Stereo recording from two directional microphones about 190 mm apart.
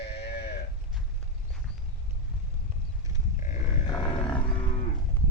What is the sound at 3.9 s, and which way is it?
Livestock, 25° left (ahead or behind).